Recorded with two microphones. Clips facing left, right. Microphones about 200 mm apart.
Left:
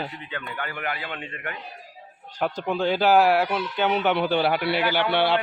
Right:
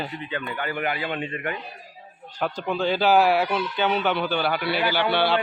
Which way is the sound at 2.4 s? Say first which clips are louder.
Left 1 dB; 20° left (ahead or behind).